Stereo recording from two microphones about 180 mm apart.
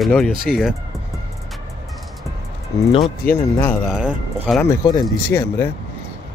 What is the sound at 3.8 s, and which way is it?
Speech, 5° right (ahead or behind).